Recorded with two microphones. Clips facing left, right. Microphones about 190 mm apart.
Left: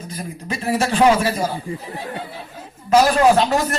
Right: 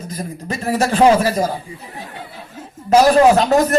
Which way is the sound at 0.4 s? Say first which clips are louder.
Right 2 dB; 35° right (ahead or behind).